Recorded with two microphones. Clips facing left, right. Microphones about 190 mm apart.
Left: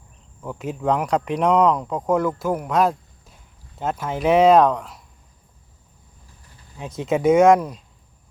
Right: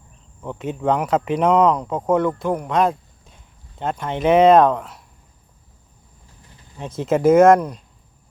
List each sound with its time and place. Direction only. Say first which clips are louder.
0.4 s speech: right 2 dB; centre (ahead or behind)
6.7 s speech: right 2 dB; centre (ahead or behind)